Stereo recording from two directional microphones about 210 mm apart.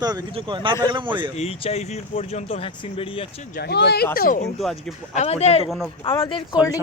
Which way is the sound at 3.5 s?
50° left (ahead or behind).